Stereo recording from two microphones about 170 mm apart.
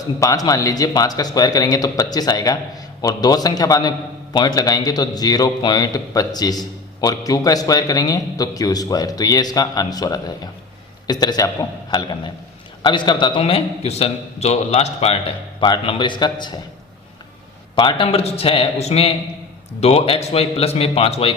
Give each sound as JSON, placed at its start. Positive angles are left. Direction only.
{"t": 0.2, "sound": "a man's voice", "side_deg": 20}
{"t": 17.7, "sound": "a man's voice", "side_deg": 30}